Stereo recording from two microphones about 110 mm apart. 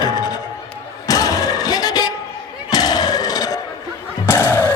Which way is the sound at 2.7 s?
35° left (ahead or behind).